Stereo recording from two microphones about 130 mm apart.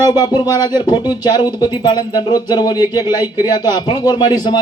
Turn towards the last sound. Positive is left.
turn(degrees=35)  # may be behind; listen again after turning